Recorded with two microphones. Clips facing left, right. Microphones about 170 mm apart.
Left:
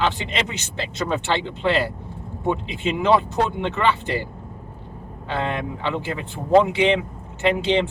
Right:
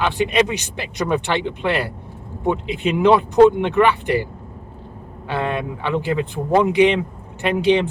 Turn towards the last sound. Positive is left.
turn(degrees=-15)  # may be behind; listen again after turning